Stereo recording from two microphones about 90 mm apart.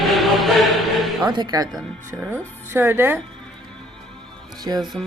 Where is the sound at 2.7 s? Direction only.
25° right (ahead or behind).